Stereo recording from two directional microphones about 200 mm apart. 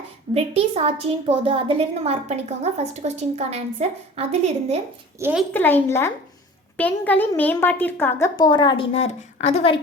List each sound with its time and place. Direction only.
0.3 s a woman's voice: 30° right (ahead or behind)
5.2 s a woman's voice: 5° right (ahead or behind)
5.5 s a child's voice: 10° left (ahead or behind); by 9.8 s 30° left (ahead or behind)